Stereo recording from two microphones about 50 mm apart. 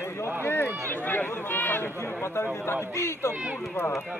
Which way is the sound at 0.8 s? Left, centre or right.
Left.